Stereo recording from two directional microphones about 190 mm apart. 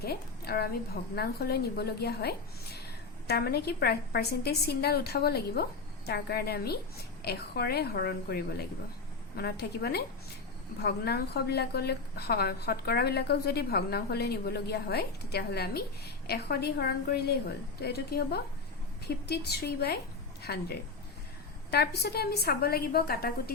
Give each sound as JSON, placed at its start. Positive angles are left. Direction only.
{"t": 0.0, "sound": "a woman's voice", "side_deg": 55}